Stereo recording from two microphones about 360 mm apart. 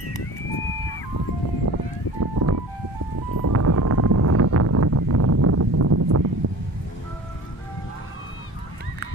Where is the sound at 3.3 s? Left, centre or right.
Right.